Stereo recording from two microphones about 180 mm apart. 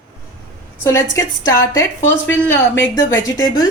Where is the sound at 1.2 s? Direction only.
20° left (ahead or behind).